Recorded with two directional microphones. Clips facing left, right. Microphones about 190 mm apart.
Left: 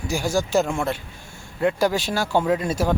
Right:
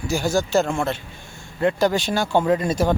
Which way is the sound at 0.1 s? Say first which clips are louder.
Right 1 dB; 10° left (ahead or behind).